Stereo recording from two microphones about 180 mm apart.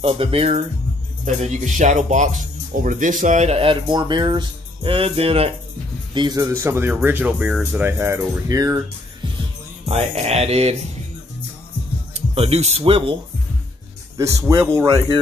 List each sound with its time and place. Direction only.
0.0 s speech: 30° right (ahead or behind)
6.1 s speech: 20° right (ahead or behind)
9.8 s speech: 35° right (ahead or behind)
12.1 s speech: 35° right (ahead or behind)
14.1 s speech: 15° right (ahead or behind)